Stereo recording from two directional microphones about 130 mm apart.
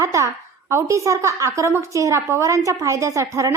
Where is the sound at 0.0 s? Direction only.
25° right (ahead or behind).